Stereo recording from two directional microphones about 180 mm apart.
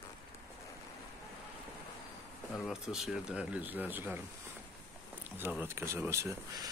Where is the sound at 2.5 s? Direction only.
Centre (ahead or behind).